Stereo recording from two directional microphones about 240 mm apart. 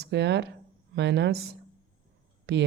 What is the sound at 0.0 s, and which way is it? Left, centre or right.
A woman's voice, right.